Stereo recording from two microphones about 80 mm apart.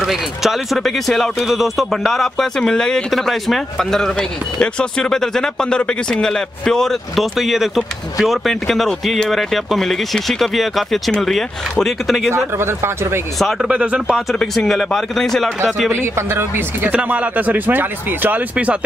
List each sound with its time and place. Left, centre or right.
0.0 s speech: centre
12.5 s speech: right
13.4 s speech: centre
14.4 s speech: centre
15.9 s speech: right